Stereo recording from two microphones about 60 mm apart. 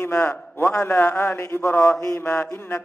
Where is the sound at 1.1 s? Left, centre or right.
Left.